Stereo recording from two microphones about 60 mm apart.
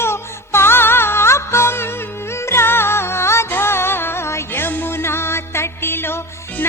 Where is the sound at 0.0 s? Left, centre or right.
Left.